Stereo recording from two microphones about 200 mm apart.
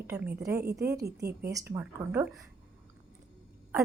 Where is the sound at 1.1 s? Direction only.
55° right (ahead or behind).